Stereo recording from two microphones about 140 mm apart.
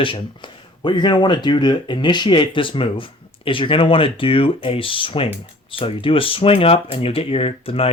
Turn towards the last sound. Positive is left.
turn(degrees=45)  # may be behind; listen again after turning